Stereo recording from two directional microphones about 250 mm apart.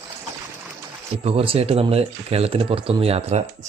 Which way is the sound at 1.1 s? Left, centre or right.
Right.